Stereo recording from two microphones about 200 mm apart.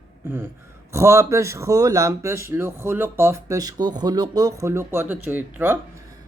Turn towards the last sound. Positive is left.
turn(degrees=-10)  # may be behind; listen again after turning